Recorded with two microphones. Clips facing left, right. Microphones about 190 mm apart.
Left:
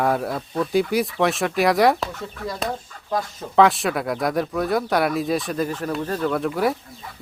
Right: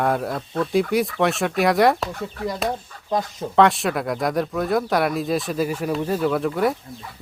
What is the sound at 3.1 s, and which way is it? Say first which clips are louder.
Speech: right 2 dB; 20° right (ahead or behind).